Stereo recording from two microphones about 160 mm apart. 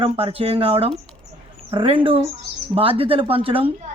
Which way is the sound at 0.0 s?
35° right (ahead or behind).